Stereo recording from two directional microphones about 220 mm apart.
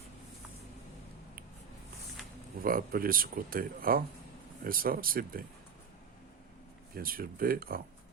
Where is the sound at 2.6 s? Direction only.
40° right (ahead or behind).